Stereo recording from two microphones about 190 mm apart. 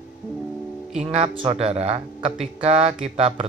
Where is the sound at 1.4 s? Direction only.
30° right (ahead or behind).